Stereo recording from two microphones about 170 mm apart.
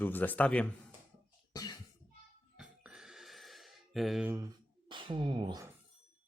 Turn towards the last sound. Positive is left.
turn(degrees=-25)  # may be behind; listen again after turning